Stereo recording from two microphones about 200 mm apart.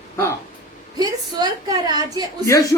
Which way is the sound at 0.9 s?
20° right (ahead or behind).